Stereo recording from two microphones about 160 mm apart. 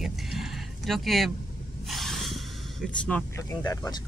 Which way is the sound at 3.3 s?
20° left (ahead or behind).